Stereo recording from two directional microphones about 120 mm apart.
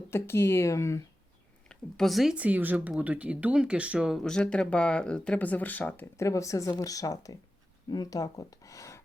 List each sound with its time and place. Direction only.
0.1 s speech: 20° left (ahead or behind)
1.6 s speech: 5° left (ahead or behind); by 9.0 s 25° left (ahead or behind)